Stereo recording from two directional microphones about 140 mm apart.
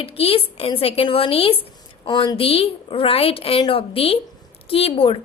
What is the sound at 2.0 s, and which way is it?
A woman's voice, 30° left (ahead or behind).